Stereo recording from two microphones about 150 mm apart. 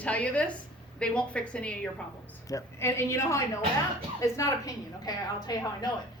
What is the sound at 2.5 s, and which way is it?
A woman's voice, 15° left (ahead or behind).